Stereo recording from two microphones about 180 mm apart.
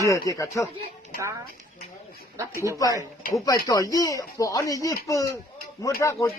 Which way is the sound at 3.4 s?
20° left (ahead or behind).